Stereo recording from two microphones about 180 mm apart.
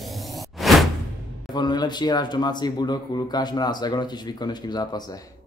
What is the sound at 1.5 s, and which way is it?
Speech, 25° left (ahead or behind).